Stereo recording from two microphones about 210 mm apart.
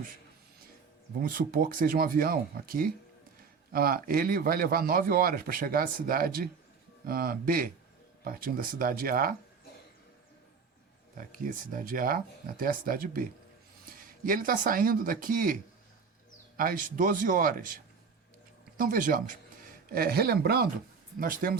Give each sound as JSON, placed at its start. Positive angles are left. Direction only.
{"t": 1.2, "sound": "a man's voice", "side_deg": -40}
{"t": 11.2, "sound": "speech", "side_deg": -40}
{"t": 16.6, "sound": "speech", "side_deg": -40}
{"t": 18.8, "sound": "a man's voice", "side_deg": -40}